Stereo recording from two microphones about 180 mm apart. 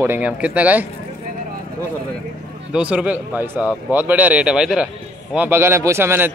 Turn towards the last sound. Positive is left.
turn(degrees=-10)  # may be behind; listen again after turning